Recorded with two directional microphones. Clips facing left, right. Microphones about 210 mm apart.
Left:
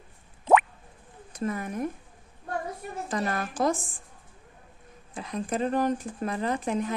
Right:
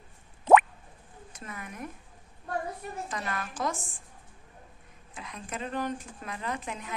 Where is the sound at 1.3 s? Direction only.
35° left (ahead or behind).